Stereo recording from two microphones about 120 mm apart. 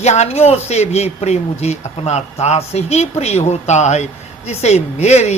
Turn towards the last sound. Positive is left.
turn(degrees=65)  # may be behind; listen again after turning